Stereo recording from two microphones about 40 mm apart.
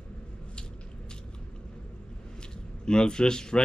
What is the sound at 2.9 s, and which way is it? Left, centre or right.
Speech, left.